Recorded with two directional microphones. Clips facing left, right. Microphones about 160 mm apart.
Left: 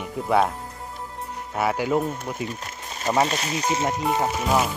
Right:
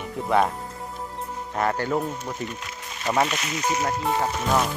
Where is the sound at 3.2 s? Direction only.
35° left (ahead or behind).